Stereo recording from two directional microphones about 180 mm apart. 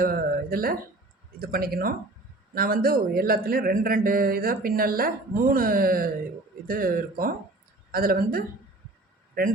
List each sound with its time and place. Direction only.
0.0 s a man's voice: 55° right (ahead or behind)